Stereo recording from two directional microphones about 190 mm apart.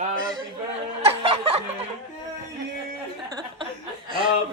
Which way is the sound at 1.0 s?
30° right (ahead or behind).